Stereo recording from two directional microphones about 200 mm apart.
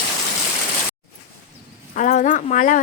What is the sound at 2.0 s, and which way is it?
Speech, 40° left (ahead or behind).